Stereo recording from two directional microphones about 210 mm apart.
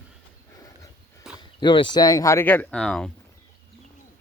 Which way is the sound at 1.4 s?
20° left (ahead or behind).